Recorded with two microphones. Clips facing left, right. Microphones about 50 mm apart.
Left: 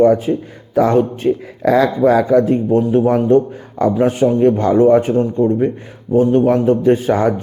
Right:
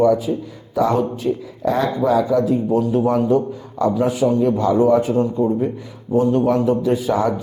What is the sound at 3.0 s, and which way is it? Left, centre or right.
A man's voice, left.